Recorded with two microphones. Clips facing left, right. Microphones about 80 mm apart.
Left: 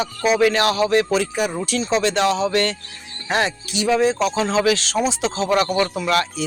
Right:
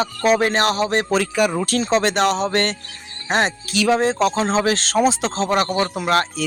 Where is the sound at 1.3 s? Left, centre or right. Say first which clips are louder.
Right 4 dB; right.